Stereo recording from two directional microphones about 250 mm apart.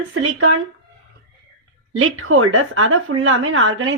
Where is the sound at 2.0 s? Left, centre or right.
Right.